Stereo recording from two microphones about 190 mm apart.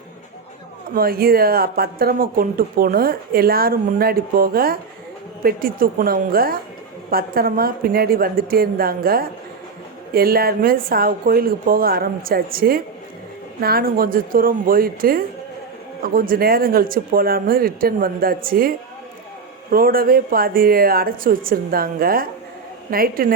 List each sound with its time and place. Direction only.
0.9 s speech: 50° right (ahead or behind)
19.7 s speech: 50° right (ahead or behind)